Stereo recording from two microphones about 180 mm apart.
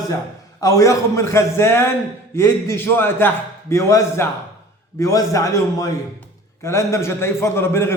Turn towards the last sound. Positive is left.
turn(degrees=15)  # may be behind; listen again after turning